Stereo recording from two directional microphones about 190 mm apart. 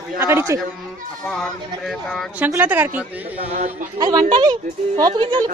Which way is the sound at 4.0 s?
20° right (ahead or behind).